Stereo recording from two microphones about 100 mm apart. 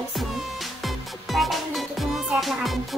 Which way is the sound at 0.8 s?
Centre (ahead or behind).